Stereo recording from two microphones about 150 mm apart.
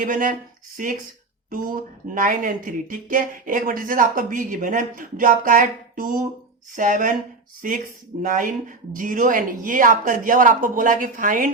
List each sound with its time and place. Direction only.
0.0 s speech: 65° right (ahead or behind)
1.5 s speech: 65° right (ahead or behind)
6.7 s speech: 60° right (ahead or behind)